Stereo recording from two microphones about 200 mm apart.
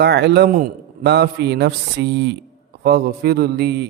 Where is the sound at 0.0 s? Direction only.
55° right (ahead or behind).